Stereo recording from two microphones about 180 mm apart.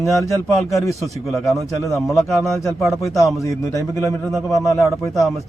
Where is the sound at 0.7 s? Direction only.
15° left (ahead or behind).